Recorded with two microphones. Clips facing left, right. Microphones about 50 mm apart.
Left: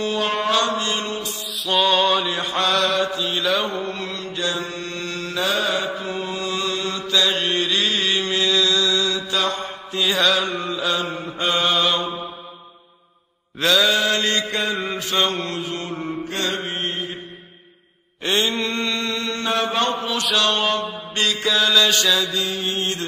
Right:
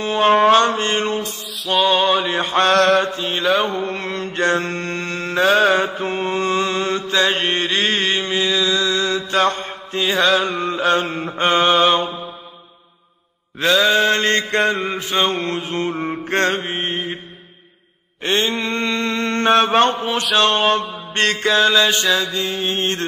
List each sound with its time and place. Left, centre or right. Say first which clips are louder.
0.0 s mantra: right 8 dB; right
1.6 s mantra: right 2 dB; centre
1.9 s male singing: right 2 dB; centre
2.2 s mantra: right 5 dB; right
8.3 s mantra: right 1 dB; centre
8.8 s mantra: right 2 dB; right
10.0 s mantra: right 3 dB; right
13.6 s mantra: right 3 dB; right
15.0 s mantra: right 2 dB; right
16.6 s mantra: right 3 dB; right
18.2 s mantra: right 2 dB; right
21.1 s music: right 5 dB; right
21.5 s mantra: right 2 dB; right